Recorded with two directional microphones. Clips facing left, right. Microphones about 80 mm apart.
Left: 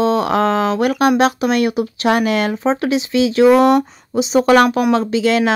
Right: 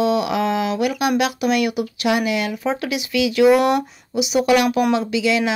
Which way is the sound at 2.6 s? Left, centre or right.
Left.